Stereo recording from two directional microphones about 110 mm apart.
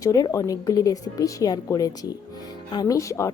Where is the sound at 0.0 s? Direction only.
30° left (ahead or behind).